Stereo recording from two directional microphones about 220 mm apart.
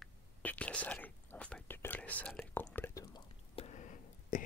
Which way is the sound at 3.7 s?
35° left (ahead or behind).